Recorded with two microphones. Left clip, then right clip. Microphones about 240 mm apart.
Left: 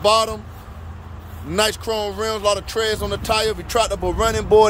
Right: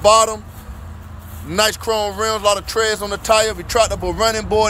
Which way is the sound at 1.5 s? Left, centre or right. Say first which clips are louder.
Right 3 dB; centre.